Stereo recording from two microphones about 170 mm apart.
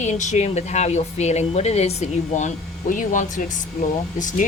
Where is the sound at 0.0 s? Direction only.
45° left (ahead or behind).